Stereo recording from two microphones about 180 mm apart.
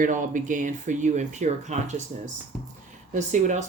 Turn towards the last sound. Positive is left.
turn(degrees=-40)  # may be behind; listen again after turning